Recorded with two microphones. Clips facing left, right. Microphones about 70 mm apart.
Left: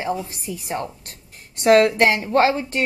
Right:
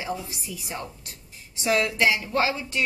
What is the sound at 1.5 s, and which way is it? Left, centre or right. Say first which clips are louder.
A woman's voice: left 10 dB; left.